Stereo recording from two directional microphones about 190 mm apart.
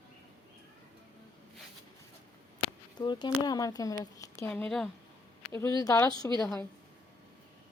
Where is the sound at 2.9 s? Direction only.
25° left (ahead or behind); by 4.9 s 5° left (ahead or behind).